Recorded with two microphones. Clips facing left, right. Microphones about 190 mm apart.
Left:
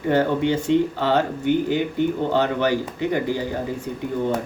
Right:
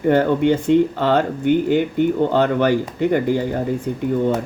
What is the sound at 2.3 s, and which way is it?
Speech, 50° right (ahead or behind).